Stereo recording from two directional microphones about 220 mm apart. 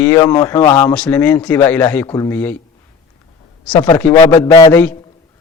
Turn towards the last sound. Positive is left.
turn(degrees=10)  # may be behind; listen again after turning